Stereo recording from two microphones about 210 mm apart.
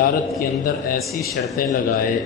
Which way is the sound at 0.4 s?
45° left (ahead or behind).